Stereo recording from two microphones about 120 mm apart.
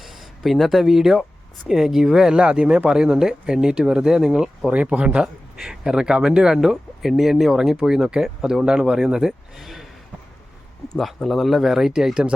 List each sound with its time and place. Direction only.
0.0 s speech: centre (ahead or behind)
10.9 s speech: centre (ahead or behind)